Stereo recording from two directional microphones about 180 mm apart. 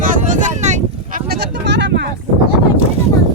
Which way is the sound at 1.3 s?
65° right (ahead or behind).